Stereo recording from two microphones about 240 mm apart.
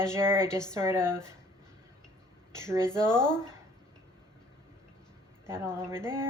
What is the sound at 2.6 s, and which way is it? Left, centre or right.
Speech, centre.